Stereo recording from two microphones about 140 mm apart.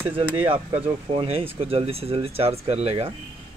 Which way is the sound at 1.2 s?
40° right (ahead or behind).